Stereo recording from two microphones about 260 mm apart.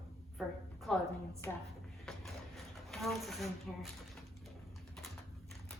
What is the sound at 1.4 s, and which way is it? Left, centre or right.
Speech, centre.